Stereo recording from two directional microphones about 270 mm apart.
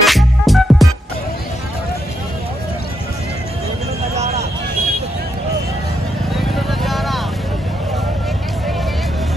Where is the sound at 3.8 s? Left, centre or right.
Right.